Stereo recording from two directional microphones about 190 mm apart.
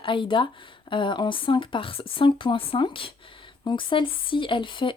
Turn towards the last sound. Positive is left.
turn(degrees=25)  # may be behind; listen again after turning